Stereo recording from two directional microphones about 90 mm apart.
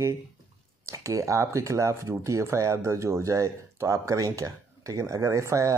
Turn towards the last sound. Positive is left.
turn(degrees=-35)  # may be behind; listen again after turning